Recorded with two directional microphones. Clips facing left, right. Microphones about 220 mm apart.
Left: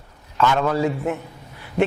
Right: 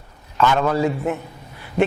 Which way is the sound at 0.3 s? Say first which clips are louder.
Right 1 dB; 20° right (ahead or behind).